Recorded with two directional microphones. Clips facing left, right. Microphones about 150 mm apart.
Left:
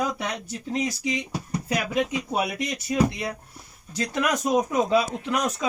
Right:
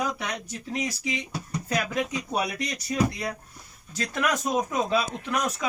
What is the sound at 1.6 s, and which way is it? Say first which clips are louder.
Speech: left 2 dB; 15° left (ahead or behind).